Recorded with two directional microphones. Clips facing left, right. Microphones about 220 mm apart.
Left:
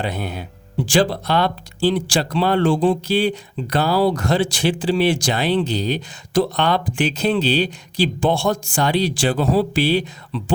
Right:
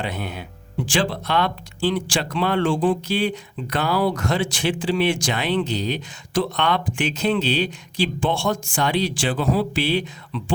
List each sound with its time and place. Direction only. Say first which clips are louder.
0.0 s speech: left 3 dB; 35° left (ahead or behind)